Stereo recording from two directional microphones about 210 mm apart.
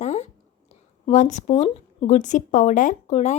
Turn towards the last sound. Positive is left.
turn(degrees=35)  # may be behind; listen again after turning